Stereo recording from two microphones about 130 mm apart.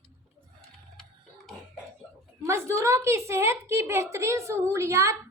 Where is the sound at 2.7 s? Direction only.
20° right (ahead or behind).